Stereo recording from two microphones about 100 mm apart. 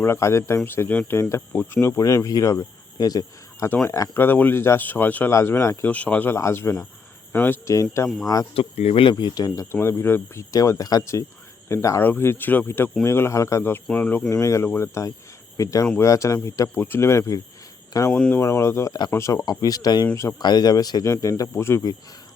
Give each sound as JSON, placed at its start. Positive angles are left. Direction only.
{"t": 0.0, "sound": "speech", "side_deg": 25}
{"t": 4.1, "sound": "speech", "side_deg": 20}
{"t": 5.3, "sound": "speech", "side_deg": 30}
{"t": 5.8, "sound": "speech", "side_deg": 15}
{"t": 7.7, "sound": "speech", "side_deg": 30}
{"t": 8.5, "sound": "speech", "side_deg": 90}
{"t": 9.1, "sound": "speech", "side_deg": 45}
{"t": 9.7, "sound": "speech", "side_deg": 25}
{"t": 10.5, "sound": "speech", "side_deg": 35}
{"t": 14.4, "sound": "speech", "side_deg": 30}
{"t": 18.1, "sound": "speech", "side_deg": 10}
{"t": 18.3, "sound": "speech", "side_deg": 25}
{"t": 19.5, "sound": "speech", "side_deg": 40}